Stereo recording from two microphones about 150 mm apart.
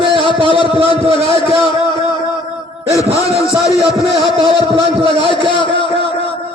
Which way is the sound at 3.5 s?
20° left (ahead or behind).